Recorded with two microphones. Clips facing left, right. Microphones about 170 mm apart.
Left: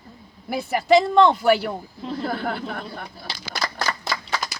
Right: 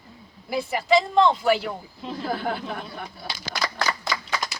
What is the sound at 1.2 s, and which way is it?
Speech, 55° left (ahead or behind).